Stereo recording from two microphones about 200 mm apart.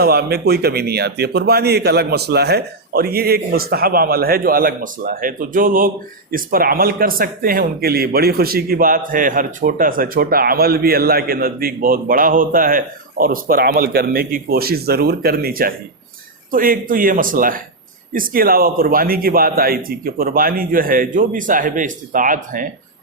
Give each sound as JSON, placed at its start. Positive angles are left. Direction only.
{"t": 0.0, "sound": "speech", "side_deg": -50}